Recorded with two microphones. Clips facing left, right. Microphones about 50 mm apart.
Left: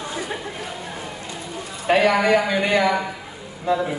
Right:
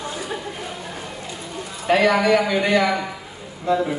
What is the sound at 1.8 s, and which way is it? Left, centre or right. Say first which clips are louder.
A man's voice: even; left.